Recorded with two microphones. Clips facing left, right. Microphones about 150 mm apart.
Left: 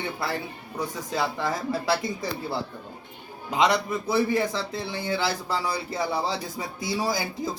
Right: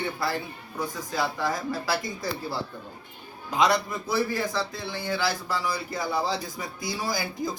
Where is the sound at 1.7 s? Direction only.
25° left (ahead or behind).